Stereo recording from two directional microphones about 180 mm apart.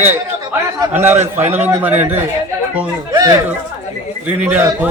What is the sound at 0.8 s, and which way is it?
A man's voice, 15° right (ahead or behind).